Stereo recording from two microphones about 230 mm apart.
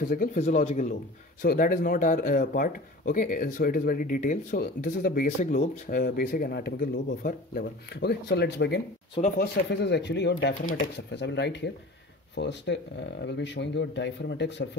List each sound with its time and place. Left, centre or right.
0.1 s speech: left